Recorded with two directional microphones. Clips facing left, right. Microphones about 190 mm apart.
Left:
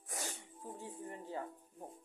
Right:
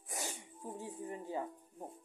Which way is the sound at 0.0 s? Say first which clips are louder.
Right 2 dB; 15° right (ahead or behind).